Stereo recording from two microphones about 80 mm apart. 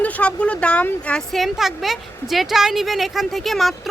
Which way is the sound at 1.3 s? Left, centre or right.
Centre.